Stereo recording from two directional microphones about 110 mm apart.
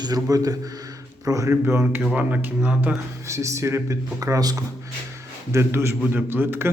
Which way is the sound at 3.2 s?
25° right (ahead or behind).